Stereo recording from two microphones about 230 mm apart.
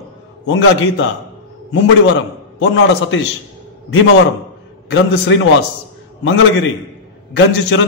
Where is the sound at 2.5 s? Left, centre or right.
Left.